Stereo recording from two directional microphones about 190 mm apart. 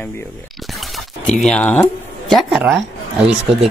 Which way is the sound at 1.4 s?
5° left (ahead or behind).